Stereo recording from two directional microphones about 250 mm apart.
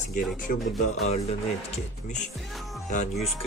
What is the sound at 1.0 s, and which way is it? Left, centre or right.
Speech, left.